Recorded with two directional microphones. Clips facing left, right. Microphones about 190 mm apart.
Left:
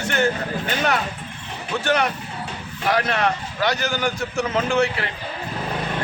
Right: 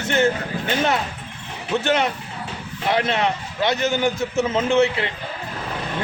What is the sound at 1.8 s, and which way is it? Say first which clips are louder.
Speech: left 2 dB; 25° right (ahead or behind).